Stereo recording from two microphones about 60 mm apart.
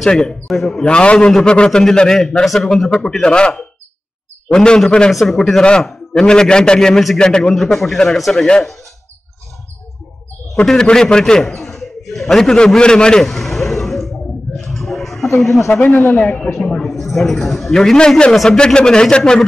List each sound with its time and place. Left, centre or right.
0.0 s a man's voice: centre
10.5 s a man's voice: centre
12.5 s a sound: centre
15.2 s speech: left
15.8 s speech: left
16.2 s speech: centre
16.8 s a man's voice: centre
18.3 s a man's voice: centre